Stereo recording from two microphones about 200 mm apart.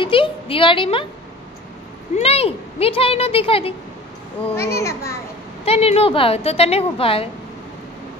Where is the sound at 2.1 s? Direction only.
30° left (ahead or behind).